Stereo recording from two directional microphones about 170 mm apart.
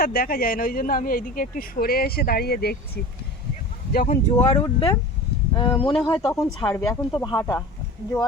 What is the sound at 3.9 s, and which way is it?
Speech, 60° left (ahead or behind).